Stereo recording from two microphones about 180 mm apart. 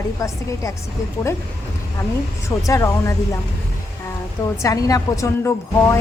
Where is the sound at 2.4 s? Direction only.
15° left (ahead or behind).